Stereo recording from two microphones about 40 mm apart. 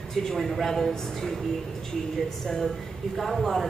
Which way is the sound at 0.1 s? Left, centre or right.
Centre.